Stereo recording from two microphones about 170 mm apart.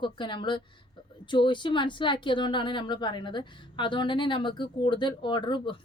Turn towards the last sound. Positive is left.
turn(degrees=30)  # may be behind; listen again after turning